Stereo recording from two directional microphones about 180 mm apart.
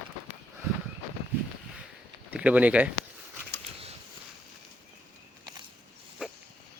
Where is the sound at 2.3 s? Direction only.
10° right (ahead or behind).